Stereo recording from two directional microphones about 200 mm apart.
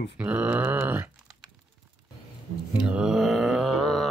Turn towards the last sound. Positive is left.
turn(degrees=0)  # may be behind; listen again after turning